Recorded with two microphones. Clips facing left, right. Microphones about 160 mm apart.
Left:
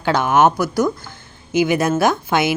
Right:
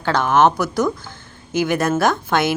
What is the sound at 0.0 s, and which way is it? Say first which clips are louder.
A woman's voice: left 1 dB; 10° left (ahead or behind).